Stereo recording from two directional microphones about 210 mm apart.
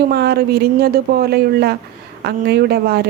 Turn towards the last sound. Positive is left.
turn(degrees=-50)  # may be behind; listen again after turning